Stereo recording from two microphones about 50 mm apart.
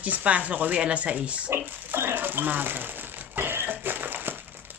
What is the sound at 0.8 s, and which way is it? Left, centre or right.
Speech, right.